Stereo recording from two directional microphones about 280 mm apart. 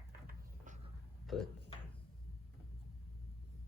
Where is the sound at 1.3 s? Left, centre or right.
Centre.